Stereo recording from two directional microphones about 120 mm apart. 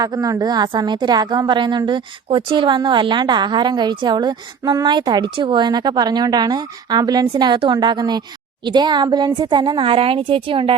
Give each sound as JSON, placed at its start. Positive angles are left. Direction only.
{"t": 0.0, "sound": "a woman's voice", "side_deg": -30}